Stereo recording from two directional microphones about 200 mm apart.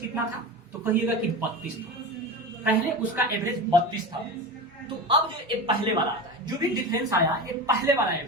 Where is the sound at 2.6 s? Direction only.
10° right (ahead or behind).